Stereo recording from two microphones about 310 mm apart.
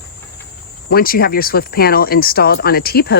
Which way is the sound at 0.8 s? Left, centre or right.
Left.